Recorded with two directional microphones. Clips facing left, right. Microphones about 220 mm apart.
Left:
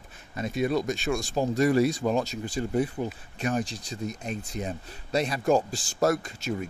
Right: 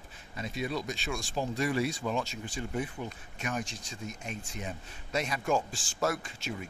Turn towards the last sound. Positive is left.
turn(degrees=40)  # may be behind; listen again after turning